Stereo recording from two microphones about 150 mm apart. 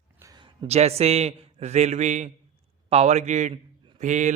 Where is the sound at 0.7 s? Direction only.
45° right (ahead or behind).